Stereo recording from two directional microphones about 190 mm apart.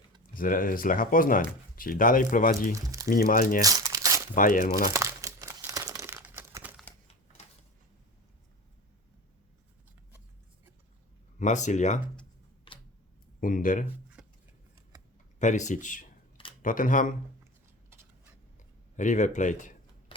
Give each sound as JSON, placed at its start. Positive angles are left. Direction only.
{"t": 0.3, "sound": "speech", "side_deg": 45}
{"t": 2.7, "sound": "speech", "side_deg": -20}
{"t": 3.1, "sound": "speech", "side_deg": 50}
{"t": 3.6, "sound": "crumpling", "side_deg": -15}
{"t": 4.4, "sound": "speech", "side_deg": 45}
{"t": 4.9, "sound": "crumpling", "side_deg": -15}
{"t": 11.3, "sound": "speech", "side_deg": 40}
{"t": 12.7, "sound": "a sound", "side_deg": 30}
{"t": 13.4, "sound": "speech", "side_deg": 45}
{"t": 14.2, "sound": "a sound", "side_deg": -5}
{"t": 15.4, "sound": "speech", "side_deg": 40}
{"t": 18.9, "sound": "speech", "side_deg": 40}